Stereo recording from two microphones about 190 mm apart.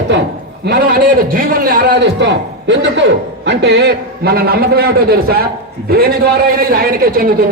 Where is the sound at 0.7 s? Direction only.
55° right (ahead or behind).